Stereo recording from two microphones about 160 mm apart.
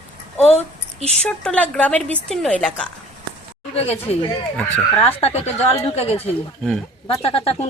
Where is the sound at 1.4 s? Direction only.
5° left (ahead or behind).